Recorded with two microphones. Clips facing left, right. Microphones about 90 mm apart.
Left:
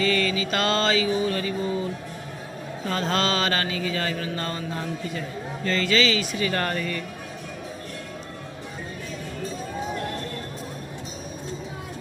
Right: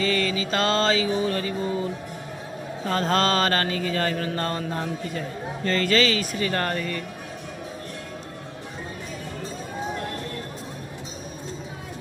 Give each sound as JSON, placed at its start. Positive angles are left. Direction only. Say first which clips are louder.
{"t": 0.0, "sound": "mantra", "louder": "left 1 dB", "side_deg": -30}
{"t": 2.9, "sound": "mantra", "louder": "right 3 dB", "side_deg": -40}
{"t": 6.5, "sound": "speech", "louder": "even", "side_deg": -30}